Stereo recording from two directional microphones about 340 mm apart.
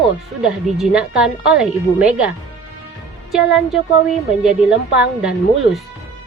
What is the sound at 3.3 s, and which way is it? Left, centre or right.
A woman's voice, centre.